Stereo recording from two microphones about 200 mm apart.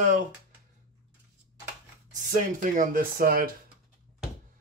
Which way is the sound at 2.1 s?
40° right (ahead or behind).